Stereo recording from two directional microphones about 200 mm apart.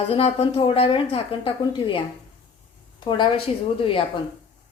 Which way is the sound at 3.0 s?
20° left (ahead or behind).